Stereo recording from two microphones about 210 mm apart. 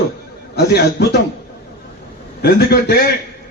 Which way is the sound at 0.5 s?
50° left (ahead or behind).